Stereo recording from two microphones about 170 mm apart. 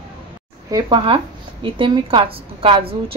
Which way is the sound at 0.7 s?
25° right (ahead or behind).